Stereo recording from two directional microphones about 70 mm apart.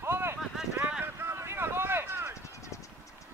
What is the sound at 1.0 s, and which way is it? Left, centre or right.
Vehicle, right.